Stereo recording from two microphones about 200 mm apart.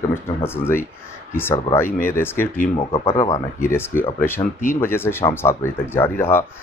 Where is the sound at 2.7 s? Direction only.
25° left (ahead or behind).